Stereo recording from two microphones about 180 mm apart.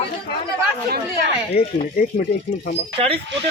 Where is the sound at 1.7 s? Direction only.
55° left (ahead or behind).